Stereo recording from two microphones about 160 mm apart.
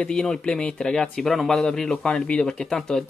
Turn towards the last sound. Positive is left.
turn(degrees=5)  # may be behind; listen again after turning